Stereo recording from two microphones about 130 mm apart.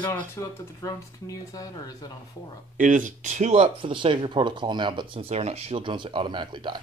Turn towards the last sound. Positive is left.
turn(degrees=-35)  # may be behind; listen again after turning